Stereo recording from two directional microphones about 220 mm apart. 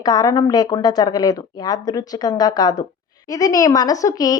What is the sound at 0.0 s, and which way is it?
Speech, 15° left (ahead or behind).